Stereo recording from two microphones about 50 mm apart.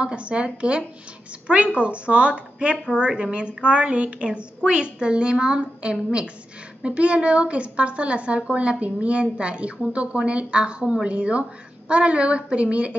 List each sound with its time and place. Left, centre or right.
0.0 s a woman's voice: right